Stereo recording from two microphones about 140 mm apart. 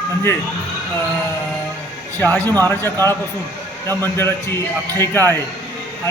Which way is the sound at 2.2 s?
10° left (ahead or behind).